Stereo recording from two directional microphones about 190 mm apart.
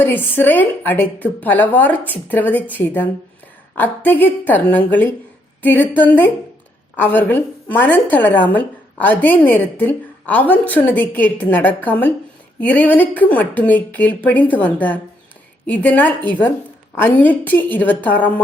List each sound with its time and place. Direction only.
0.0 s a woman's voice: 10° left (ahead or behind)